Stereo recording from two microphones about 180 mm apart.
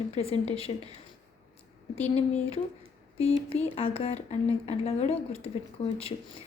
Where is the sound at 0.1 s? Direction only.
35° left (ahead or behind).